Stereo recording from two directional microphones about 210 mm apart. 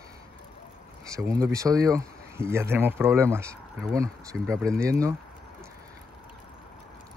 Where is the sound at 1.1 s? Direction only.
15° right (ahead or behind).